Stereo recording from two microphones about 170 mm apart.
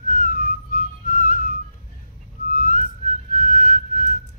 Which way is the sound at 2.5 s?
50° left (ahead or behind).